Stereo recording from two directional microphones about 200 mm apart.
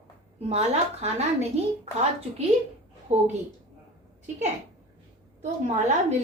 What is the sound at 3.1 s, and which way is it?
Speech, 35° right (ahead or behind).